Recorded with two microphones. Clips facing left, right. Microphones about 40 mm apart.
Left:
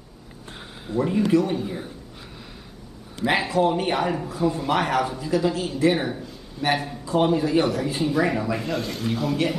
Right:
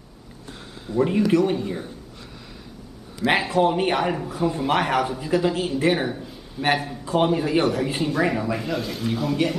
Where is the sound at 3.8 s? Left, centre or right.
Right.